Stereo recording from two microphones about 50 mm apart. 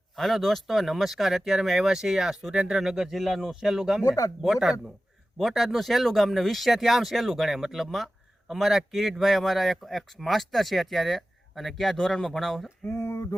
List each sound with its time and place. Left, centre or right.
0.2 s speech: centre
12.9 s speech: left